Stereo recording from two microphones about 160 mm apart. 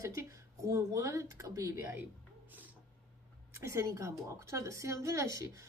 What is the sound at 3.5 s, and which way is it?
A woman's voice, 20° right (ahead or behind).